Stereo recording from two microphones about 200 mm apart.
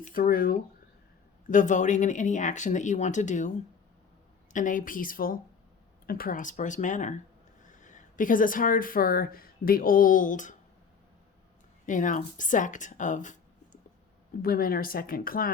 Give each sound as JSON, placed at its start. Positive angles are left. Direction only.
{"t": 0.0, "sound": "speech", "side_deg": 45}
{"t": 4.5, "sound": "speech", "side_deg": 40}
{"t": 11.9, "sound": "speech", "side_deg": 40}
{"t": 14.4, "sound": "speech", "side_deg": 45}